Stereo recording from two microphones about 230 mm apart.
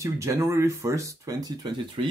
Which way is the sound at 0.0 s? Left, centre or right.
Centre.